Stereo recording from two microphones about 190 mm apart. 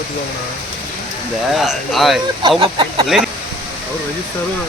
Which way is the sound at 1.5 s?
Centre (ahead or behind).